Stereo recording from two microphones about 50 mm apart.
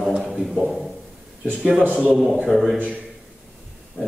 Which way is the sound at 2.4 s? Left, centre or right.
Centre.